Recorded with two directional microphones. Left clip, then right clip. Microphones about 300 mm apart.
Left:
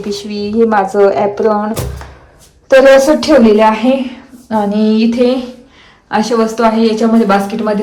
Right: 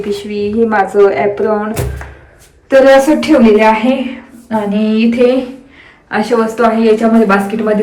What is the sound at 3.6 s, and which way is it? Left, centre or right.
Speech, centre.